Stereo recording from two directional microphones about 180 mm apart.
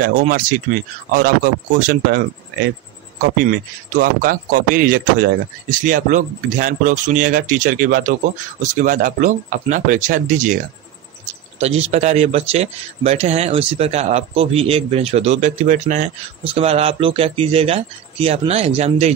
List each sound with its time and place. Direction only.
0.0 s a man's voice: 50° right (ahead or behind)
3.4 s a man's voice: 50° right (ahead or behind)
11.6 s a man's voice: 35° right (ahead or behind)
16.4 s a man's voice: 35° right (ahead or behind)